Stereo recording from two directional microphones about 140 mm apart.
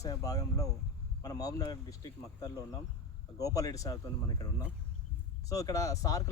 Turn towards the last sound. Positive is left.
turn(degrees=25)  # may be behind; listen again after turning